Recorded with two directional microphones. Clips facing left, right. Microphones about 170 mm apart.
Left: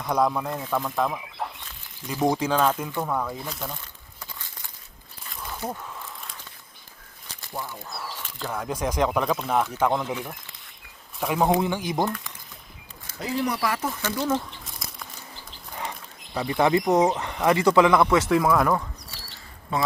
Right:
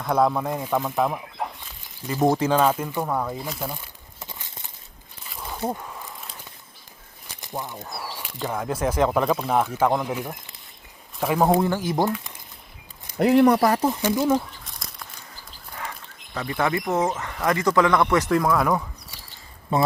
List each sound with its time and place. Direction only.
0.0 s speech: 5° right (ahead or behind)
4.2 s a sound: 20° right (ahead or behind)
5.3 s a sound: 5° right (ahead or behind)
7.4 s speech: 20° right (ahead or behind)
7.9 s speech: 5° right (ahead or behind)
13.1 s speech: 65° right (ahead or behind); by 13.8 s 40° right (ahead or behind)
13.8 s speech: 20° right (ahead or behind)
14.6 s crumpling: centre (ahead or behind)
15.8 s speech: 20° left (ahead or behind); by 18.9 s centre (ahead or behind)